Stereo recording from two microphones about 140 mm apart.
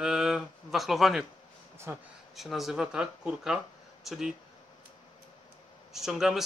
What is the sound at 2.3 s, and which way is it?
Speech, centre (ahead or behind).